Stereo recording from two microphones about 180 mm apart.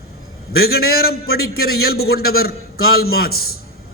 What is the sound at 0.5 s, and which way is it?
A man's voice, 60° left (ahead or behind).